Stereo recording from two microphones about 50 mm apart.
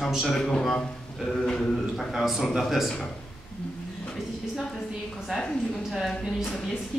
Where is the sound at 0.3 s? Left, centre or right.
Centre.